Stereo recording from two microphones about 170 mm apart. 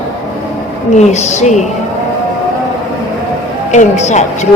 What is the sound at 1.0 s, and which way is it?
Speech, 40° left (ahead or behind).